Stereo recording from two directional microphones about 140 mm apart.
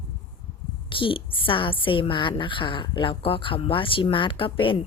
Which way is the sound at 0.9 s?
40° left (ahead or behind).